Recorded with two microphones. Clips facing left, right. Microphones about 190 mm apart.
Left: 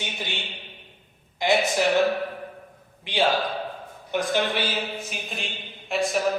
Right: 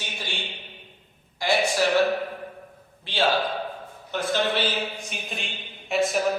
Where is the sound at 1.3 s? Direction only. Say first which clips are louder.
Left 1 dB; 20° left (ahead or behind).